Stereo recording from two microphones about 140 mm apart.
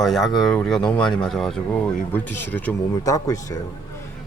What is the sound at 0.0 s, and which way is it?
Speech, centre (ahead or behind).